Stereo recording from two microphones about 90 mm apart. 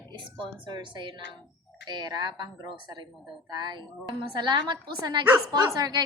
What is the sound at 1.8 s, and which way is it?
A woman's voice, 50° right (ahead or behind).